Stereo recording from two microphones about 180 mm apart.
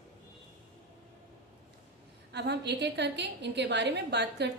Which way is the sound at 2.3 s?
70° right (ahead or behind).